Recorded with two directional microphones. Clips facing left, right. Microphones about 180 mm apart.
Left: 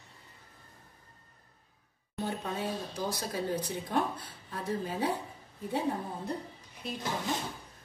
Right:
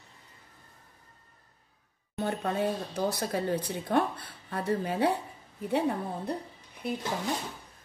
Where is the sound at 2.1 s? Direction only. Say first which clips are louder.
Right 5 dB; 60° right (ahead or behind).